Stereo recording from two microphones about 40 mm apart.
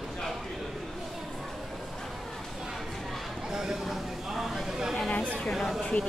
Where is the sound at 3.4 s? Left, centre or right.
Centre.